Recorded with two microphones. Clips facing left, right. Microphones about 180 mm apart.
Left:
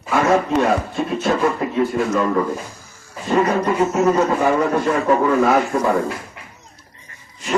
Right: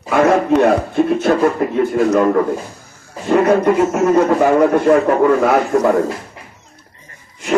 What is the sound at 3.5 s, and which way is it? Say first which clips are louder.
Music: right 5 dB; 50° right (ahead or behind).